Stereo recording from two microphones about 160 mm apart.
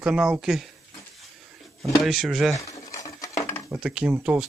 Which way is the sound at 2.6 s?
20° left (ahead or behind).